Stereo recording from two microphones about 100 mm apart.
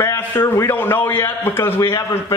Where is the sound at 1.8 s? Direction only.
35° left (ahead or behind).